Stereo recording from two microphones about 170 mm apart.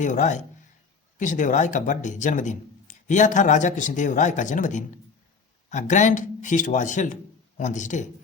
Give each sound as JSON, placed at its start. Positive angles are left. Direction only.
{"t": 0.0, "sound": "a man's voice", "side_deg": 45}